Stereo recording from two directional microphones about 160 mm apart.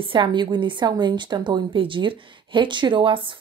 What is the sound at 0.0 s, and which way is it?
A woman's voice, 30° right (ahead or behind).